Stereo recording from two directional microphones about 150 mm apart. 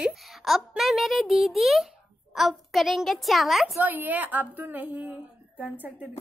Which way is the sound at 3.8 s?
10° right (ahead or behind).